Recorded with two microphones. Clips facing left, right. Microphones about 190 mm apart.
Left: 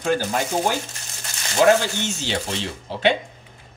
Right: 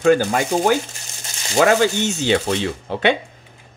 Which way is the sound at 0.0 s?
90° right.